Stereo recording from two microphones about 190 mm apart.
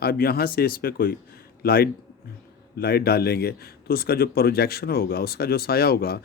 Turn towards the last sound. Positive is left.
turn(degrees=55)  # may be behind; listen again after turning